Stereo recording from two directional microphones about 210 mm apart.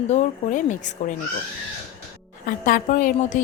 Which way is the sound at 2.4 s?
40° left (ahead or behind).